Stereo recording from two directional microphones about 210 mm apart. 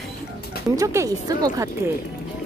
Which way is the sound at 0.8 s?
15° right (ahead or behind).